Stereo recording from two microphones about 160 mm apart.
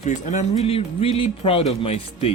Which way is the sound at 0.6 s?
35° left (ahead or behind).